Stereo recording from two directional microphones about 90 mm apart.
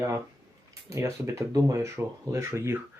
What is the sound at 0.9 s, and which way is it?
Speech, 35° right (ahead or behind).